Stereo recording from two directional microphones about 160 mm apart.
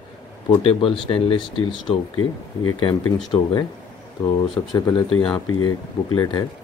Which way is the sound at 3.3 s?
25° left (ahead or behind).